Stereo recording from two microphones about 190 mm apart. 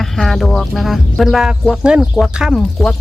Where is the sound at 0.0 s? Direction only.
Centre (ahead or behind).